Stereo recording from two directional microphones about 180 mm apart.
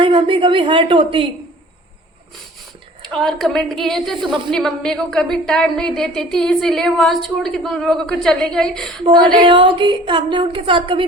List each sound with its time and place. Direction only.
0.0 s a woman's voice: 25° right (ahead or behind)
3.1 s a woman's voice: 5° left (ahead or behind)
9.0 s a woman's voice: 25° right (ahead or behind)